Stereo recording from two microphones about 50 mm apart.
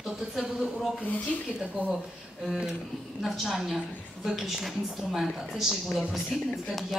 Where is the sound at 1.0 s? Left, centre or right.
Left.